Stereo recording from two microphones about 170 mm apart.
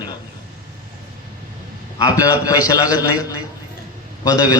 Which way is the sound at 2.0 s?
20° left (ahead or behind).